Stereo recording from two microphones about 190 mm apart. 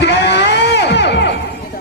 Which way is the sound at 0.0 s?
65° left (ahead or behind).